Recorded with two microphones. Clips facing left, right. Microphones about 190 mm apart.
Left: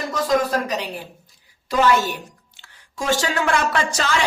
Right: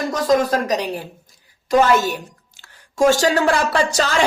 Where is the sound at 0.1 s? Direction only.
40° right (ahead or behind).